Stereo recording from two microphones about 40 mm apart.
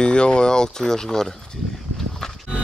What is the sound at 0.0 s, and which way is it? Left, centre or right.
Speech, left.